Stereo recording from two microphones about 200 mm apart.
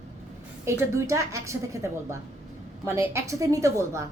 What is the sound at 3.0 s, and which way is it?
A woman's voice, 15° right (ahead or behind).